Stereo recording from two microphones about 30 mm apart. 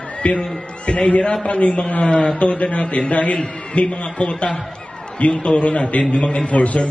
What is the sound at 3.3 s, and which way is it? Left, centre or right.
A man's voice, left.